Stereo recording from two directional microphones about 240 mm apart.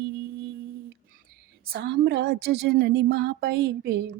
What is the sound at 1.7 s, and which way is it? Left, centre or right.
Speech, right.